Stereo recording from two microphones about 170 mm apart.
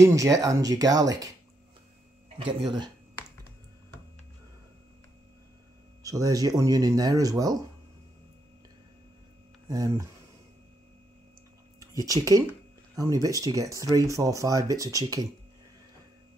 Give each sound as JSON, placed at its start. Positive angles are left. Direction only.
{"t": 0.0, "sound": "speech", "side_deg": -20}
{"t": 6.0, "sound": "speech", "side_deg": -20}
{"t": 9.7, "sound": "speech", "side_deg": -20}
{"t": 11.8, "sound": "speech", "side_deg": -20}